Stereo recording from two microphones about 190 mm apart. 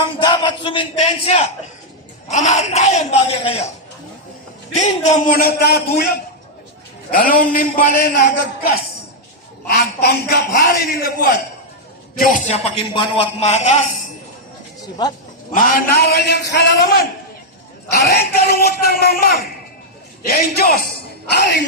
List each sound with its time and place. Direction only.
0.2 s speech: 25° left (ahead or behind)
4.7 s speech: 40° left (ahead or behind)
5.3 s a man's voice: 50° left (ahead or behind)
7.1 s a man's voice: 45° left (ahead or behind)
12.9 s speech: 25° left (ahead or behind)
15.5 s a man's voice: 50° left (ahead or behind)
17.9 s a man's voice: 55° left (ahead or behind)